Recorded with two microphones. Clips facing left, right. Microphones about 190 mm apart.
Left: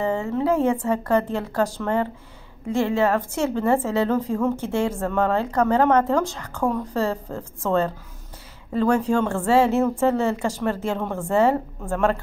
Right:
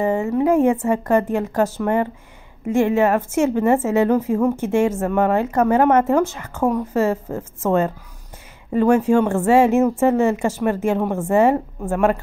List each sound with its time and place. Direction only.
0.0 s a woman's voice: 15° right (ahead or behind)